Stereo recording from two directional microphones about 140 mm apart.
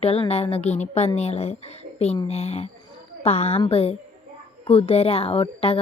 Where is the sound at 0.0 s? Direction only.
45° left (ahead or behind).